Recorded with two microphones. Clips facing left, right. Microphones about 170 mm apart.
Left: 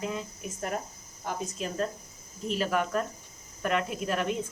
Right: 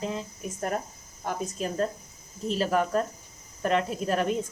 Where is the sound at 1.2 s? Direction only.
40° right (ahead or behind).